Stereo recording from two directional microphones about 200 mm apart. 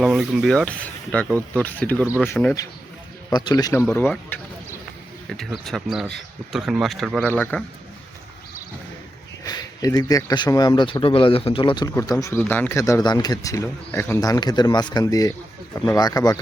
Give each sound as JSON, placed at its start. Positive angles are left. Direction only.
{"t": 0.0, "sound": "speech", "side_deg": 0}
{"t": 3.2, "sound": "speech", "side_deg": 20}
{"t": 9.4, "sound": "speech", "side_deg": 20}